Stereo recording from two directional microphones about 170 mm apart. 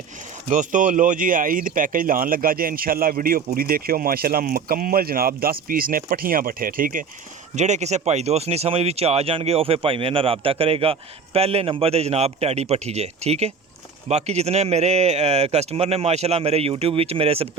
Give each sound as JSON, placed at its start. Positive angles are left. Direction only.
{"t": 0.5, "sound": "speech", "side_deg": -45}
{"t": 7.5, "sound": "speech", "side_deg": -40}